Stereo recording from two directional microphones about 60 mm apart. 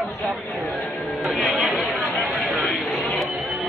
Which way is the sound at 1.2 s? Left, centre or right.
Centre.